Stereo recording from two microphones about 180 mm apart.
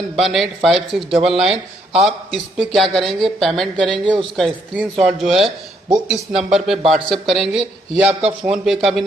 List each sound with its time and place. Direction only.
0.1 s speech: centre (ahead or behind)
3.8 s speech: 25° right (ahead or behind)
4.4 s speech: centre (ahead or behind)